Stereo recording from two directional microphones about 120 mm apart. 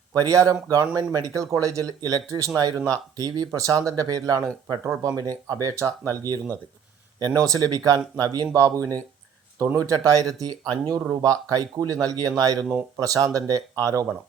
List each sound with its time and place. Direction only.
0.2 s speech: 30° right (ahead or behind)